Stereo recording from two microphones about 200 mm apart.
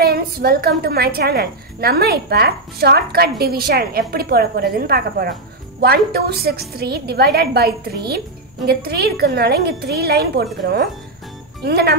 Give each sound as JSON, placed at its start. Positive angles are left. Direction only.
{"t": 0.0, "sound": "a woman's voice", "side_deg": -50}